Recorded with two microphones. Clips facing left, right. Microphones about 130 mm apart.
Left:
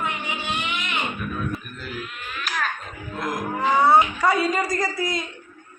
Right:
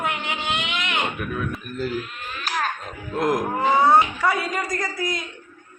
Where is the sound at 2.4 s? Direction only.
35° right (ahead or behind).